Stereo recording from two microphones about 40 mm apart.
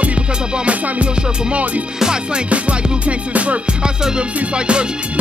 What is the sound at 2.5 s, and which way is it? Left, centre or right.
Music, right.